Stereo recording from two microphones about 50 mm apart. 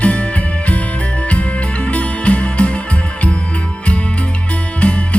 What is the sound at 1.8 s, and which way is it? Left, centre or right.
Music, left.